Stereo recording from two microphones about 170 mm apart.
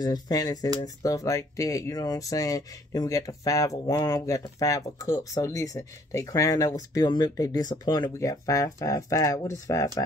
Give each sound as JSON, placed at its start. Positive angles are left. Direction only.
{"t": 0.0, "sound": "speech", "side_deg": 20}